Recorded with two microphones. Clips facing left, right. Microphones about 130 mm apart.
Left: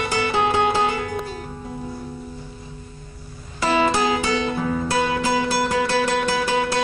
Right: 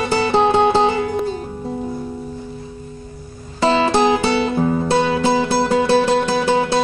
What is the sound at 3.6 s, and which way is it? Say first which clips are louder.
Music: right 4 dB; 25° right (ahead or behind).